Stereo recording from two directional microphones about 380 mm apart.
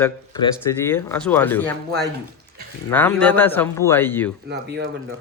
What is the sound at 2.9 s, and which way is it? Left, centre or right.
Speech, centre.